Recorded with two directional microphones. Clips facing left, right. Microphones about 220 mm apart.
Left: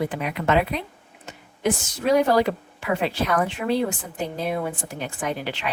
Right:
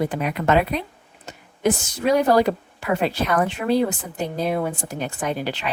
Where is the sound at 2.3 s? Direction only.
40° right (ahead or behind).